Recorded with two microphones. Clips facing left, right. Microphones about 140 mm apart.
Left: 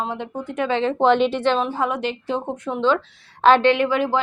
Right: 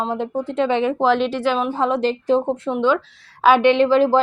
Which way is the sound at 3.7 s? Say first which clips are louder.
Right 6 dB; 30° right (ahead or behind).